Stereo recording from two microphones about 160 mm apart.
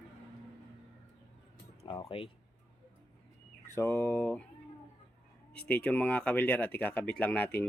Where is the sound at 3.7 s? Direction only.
15° left (ahead or behind).